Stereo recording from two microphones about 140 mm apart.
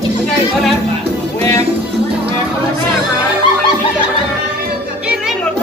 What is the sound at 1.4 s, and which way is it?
Music, 20° left (ahead or behind).